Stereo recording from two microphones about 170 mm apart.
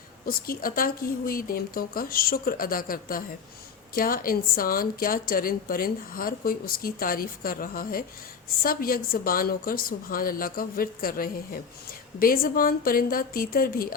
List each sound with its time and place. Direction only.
0.3 s a woman's voice: 60° left (ahead or behind)